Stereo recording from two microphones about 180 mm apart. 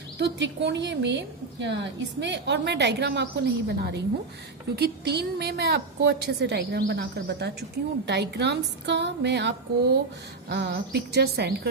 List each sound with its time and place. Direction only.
0.2 s a woman's voice: 75° right (ahead or behind)